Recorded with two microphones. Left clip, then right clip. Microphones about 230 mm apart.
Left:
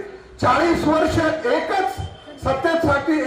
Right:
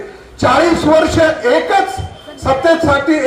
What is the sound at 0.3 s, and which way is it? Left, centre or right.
Speech, right.